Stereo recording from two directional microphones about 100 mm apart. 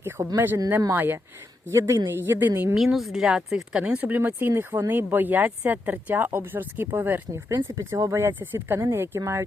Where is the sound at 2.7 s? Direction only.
5° right (ahead or behind); by 9.4 s 30° right (ahead or behind).